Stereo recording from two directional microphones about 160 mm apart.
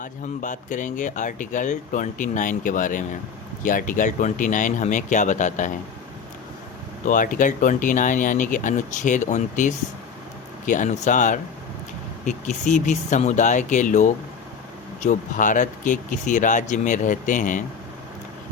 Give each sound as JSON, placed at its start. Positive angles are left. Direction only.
{"t": 0.0, "sound": "speech", "side_deg": 50}
{"t": 7.0, "sound": "speech", "side_deg": 55}